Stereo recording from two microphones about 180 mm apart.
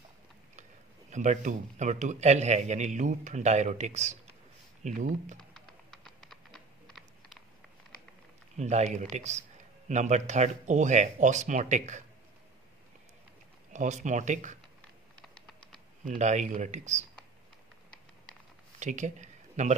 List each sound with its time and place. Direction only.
1.1 s a man's voice: 40° right (ahead or behind)
5.4 s music: centre (ahead or behind)
8.5 s a man's voice: 40° right (ahead or behind)
13.7 s a man's voice: 40° right (ahead or behind)
15.1 s typing: centre (ahead or behind)
16.1 s a man's voice: 40° right (ahead or behind)
18.8 s a sound: 40° right (ahead or behind)